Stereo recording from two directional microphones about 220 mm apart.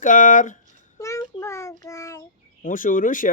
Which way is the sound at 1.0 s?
15° left (ahead or behind).